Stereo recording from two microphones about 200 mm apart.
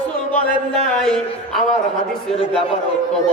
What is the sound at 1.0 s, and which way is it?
Speech, 5° left (ahead or behind).